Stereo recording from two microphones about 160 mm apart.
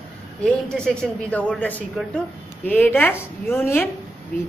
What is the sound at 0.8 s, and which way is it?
A man's voice, 5° left (ahead or behind).